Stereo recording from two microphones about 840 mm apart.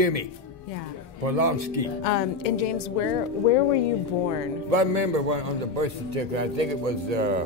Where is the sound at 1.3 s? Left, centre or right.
Right.